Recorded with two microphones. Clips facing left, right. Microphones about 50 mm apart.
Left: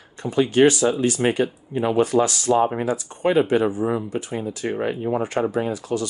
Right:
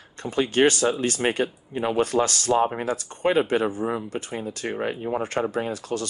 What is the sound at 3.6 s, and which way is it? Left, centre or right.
Speech, left.